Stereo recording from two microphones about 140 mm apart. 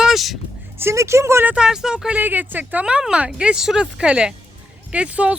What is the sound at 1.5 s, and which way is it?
Speech, 5° right (ahead or behind).